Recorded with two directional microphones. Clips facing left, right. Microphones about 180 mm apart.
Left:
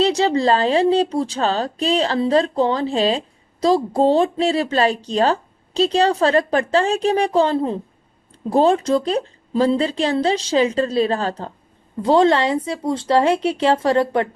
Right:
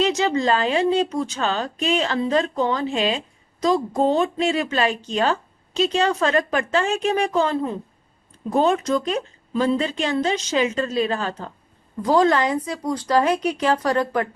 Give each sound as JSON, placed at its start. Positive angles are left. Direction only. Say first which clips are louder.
{"t": 0.0, "sound": "speech", "louder": "left 3 dB", "side_deg": 35}